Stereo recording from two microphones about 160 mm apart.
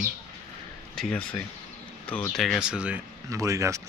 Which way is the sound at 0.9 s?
5° left (ahead or behind).